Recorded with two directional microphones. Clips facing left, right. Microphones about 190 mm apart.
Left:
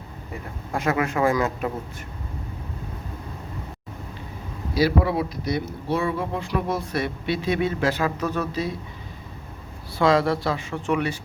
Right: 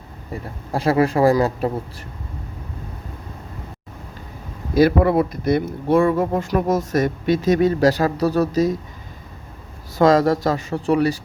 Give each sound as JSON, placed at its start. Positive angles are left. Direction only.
{"t": 0.7, "sound": "speech", "side_deg": -35}
{"t": 4.7, "sound": "speech", "side_deg": -50}
{"t": 10.0, "sound": "speech", "side_deg": -45}